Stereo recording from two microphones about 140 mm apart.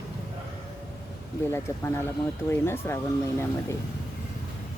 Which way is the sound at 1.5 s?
15° left (ahead or behind).